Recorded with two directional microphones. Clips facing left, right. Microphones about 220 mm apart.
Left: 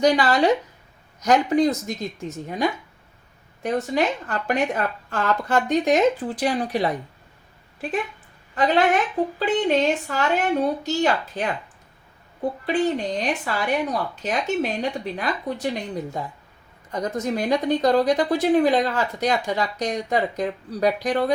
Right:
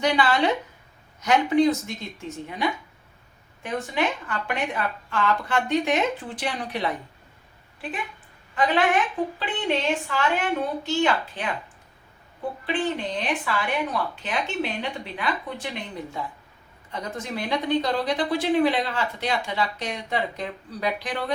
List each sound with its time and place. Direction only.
0.0 s speech: 40° left (ahead or behind)
3.6 s speech: 40° left (ahead or behind)
8.5 s a woman's voice: 40° left (ahead or behind)